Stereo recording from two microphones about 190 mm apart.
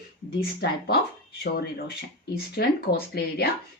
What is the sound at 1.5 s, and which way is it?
Speech, 55° left (ahead or behind).